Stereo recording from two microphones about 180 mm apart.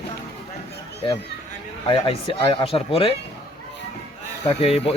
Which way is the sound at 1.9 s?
30° left (ahead or behind).